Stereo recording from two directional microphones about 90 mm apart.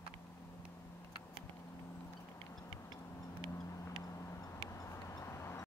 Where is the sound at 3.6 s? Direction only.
35° left (ahead or behind).